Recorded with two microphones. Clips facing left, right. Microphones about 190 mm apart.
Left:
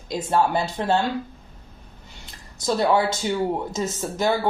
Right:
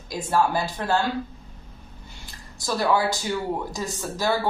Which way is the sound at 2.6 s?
25° left (ahead or behind).